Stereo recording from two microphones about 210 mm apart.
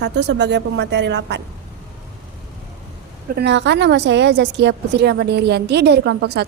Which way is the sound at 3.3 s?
55° right (ahead or behind).